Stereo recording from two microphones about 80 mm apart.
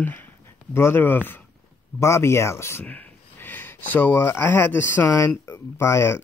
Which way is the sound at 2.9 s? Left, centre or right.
Centre.